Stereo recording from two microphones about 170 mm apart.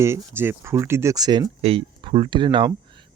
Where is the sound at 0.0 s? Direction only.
15° right (ahead or behind).